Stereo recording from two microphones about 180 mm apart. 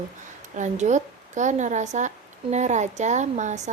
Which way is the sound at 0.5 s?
40° right (ahead or behind).